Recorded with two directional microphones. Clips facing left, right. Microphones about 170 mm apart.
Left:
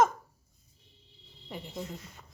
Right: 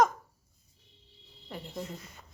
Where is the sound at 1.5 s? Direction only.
5° left (ahead or behind).